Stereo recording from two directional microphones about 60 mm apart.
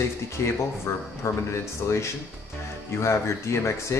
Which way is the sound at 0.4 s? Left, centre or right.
Left.